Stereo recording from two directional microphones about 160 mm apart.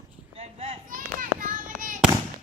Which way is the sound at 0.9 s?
55° right (ahead or behind).